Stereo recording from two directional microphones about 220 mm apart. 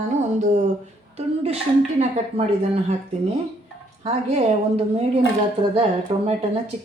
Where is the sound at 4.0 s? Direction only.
30° right (ahead or behind).